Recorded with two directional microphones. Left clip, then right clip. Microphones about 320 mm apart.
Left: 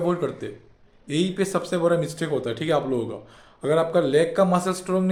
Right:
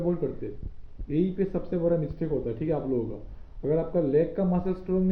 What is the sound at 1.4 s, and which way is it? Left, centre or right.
A man's voice, centre.